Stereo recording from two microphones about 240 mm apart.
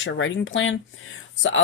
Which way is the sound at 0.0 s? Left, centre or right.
Left.